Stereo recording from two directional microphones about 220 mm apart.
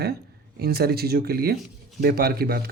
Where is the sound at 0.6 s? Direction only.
45° right (ahead or behind).